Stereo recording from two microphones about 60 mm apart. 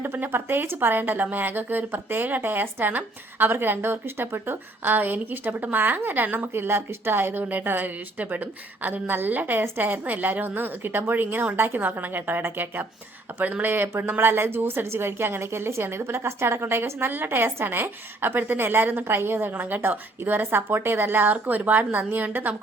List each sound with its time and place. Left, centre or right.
0.0 s speech: right